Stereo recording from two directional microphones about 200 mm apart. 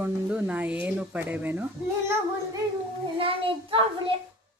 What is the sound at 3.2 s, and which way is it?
Speech, 25° right (ahead or behind).